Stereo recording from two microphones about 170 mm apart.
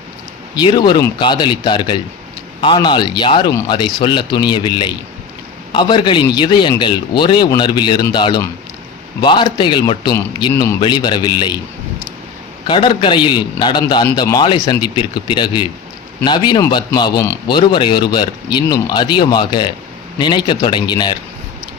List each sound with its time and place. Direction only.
0.5 s speech: 25° left (ahead or behind)
12.6 s speech: 30° left (ahead or behind)